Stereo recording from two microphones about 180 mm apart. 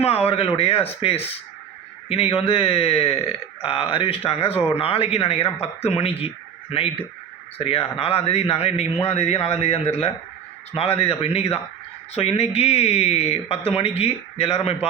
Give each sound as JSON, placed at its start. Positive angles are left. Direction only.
{"t": 0.0, "sound": "speech", "side_deg": 35}